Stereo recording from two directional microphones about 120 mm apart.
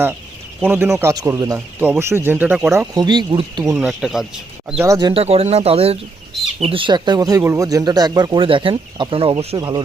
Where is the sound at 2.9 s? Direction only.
35° right (ahead or behind).